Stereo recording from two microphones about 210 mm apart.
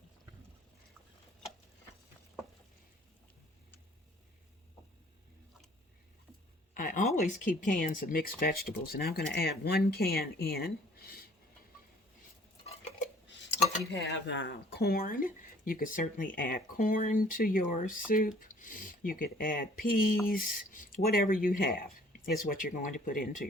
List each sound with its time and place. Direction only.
6.7 s speech: 40° left (ahead or behind)
13.2 s dishes: 60° left (ahead or behind)
13.9 s speech: 55° left (ahead or behind); by 23.5 s 40° left (ahead or behind)